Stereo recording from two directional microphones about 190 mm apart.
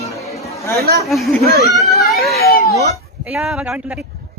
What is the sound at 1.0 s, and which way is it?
Speech, centre (ahead or behind).